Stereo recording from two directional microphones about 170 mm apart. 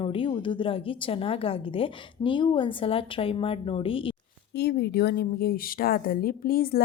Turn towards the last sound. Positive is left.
turn(degrees=60)  # may be behind; listen again after turning